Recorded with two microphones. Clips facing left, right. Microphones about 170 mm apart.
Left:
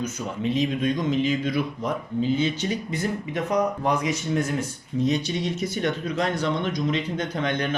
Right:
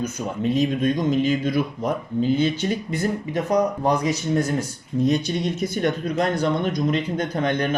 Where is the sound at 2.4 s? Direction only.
50° right (ahead or behind).